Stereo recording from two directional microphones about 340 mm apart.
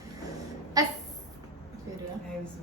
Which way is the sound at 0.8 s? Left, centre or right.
Centre.